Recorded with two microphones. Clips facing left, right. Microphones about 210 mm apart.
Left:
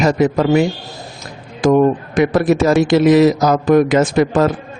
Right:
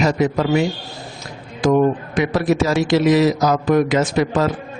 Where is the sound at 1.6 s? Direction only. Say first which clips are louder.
Left 3 dB; 50° left (ahead or behind).